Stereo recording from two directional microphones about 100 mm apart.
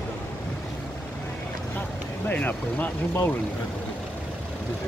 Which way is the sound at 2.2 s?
15° left (ahead or behind).